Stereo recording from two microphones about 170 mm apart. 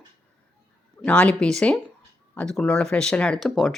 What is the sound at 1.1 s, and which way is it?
A woman's voice, 5° left (ahead or behind).